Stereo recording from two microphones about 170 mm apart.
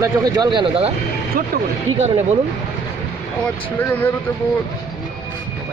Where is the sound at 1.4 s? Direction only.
55° right (ahead or behind).